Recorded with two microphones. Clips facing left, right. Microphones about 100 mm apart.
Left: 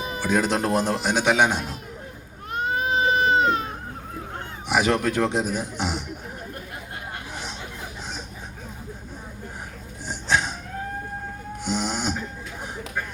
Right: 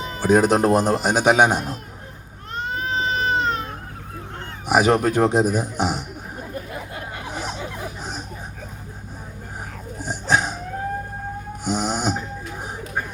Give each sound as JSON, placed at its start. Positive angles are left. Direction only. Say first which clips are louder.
{"t": 0.2, "sound": "speech", "louder": "right 7 dB", "side_deg": -45}
{"t": 2.6, "sound": "goat", "louder": "left 2 dB", "side_deg": 15}
{"t": 4.7, "sound": "a man's voice", "louder": "right 4 dB", "side_deg": -45}
{"t": 10.0, "sound": "dog", "louder": "right 3 dB", "side_deg": -45}
{"t": 11.6, "sound": "snoring", "louder": "right 3 dB", "side_deg": -45}